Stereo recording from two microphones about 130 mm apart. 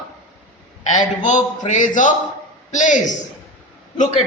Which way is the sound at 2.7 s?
70° left (ahead or behind).